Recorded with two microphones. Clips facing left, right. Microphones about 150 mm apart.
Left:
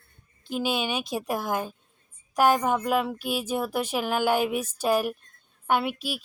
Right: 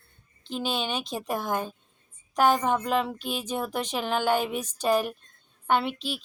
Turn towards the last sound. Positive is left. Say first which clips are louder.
# even
turn(degrees=10)  # may be behind; listen again after turning